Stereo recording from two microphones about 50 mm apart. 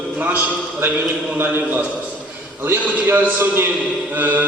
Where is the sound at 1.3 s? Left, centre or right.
Right.